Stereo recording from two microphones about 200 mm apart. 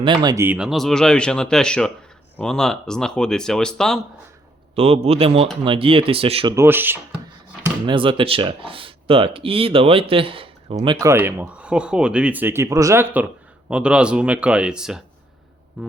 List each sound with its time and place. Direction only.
0.0 s speech: 20° right (ahead or behind); by 4.0 s 5° left (ahead or behind)
4.7 s speech: 30° right (ahead or behind)
6.5 s speech: 10° right (ahead or behind)
7.9 s speech: 25° right (ahead or behind)
11.0 s speech: 10° right (ahead or behind)
15.8 s music: 5° right (ahead or behind)